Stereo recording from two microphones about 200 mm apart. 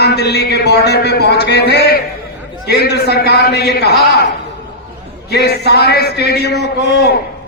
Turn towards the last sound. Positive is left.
turn(degrees=55)  # may be behind; listen again after turning